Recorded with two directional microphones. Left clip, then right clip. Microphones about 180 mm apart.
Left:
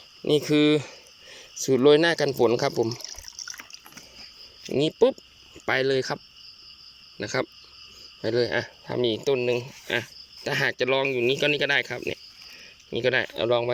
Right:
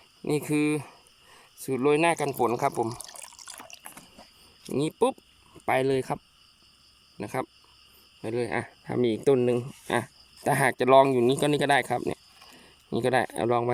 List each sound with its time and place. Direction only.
0.3 s speech: 15° right (ahead or behind)
4.6 s speech: 15° right (ahead or behind)
7.2 s speech: 20° right (ahead or behind)